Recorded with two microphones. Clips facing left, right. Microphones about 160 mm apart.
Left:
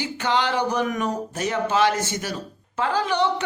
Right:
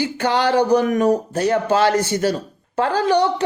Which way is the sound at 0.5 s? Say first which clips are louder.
Right 8 dB; 35° right (ahead or behind).